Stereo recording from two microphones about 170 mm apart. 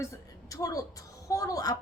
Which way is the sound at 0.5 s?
20° left (ahead or behind).